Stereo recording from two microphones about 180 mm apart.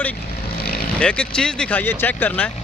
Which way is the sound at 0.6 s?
55° left (ahead or behind).